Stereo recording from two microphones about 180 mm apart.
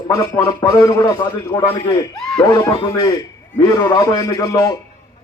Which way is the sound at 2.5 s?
20° left (ahead or behind).